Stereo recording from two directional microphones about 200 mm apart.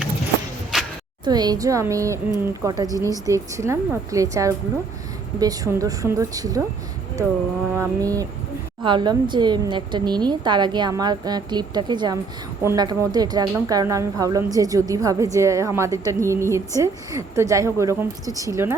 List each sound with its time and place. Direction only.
0.7 s a sound: centre (ahead or behind)
1.2 s a woman's voice: 20° right (ahead or behind)
7.8 s a woman's voice: 15° right (ahead or behind)